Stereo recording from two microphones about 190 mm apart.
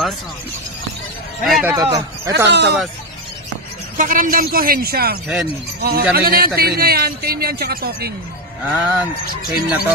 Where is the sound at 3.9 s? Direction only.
45° right (ahead or behind).